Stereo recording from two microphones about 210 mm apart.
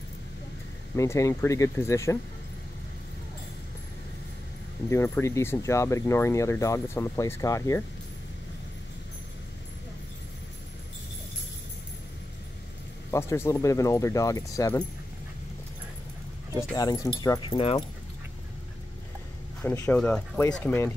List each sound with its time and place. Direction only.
0.9 s speech: 15° left (ahead or behind)
4.8 s speech: 10° left (ahead or behind)
13.1 s speech: 15° left (ahead or behind)
16.7 s speech: 15° left (ahead or behind)
19.6 s speech: 10° left (ahead or behind)